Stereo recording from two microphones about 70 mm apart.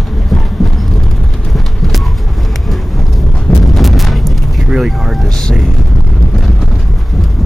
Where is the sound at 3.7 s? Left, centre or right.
Centre.